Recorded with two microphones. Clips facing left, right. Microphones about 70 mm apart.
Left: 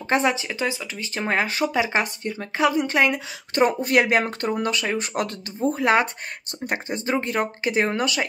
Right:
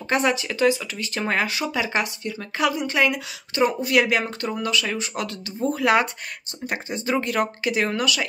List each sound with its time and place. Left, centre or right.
0.1 s speech: left
1.8 s speech: left
5.6 s speech: left